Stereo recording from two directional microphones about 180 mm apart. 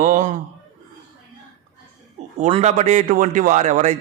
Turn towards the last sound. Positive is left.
turn(degrees=-40)  # may be behind; listen again after turning